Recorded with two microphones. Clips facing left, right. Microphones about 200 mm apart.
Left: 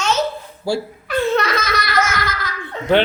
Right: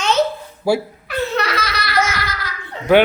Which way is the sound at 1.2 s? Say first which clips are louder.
Left 2 dB; 50° left (ahead or behind).